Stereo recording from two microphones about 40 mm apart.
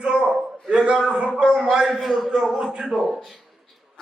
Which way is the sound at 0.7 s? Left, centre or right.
Right.